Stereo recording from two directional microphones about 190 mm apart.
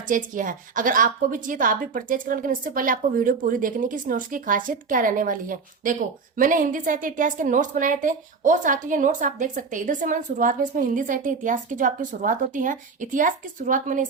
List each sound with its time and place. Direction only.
0.1 s a woman's voice: 45° right (ahead or behind)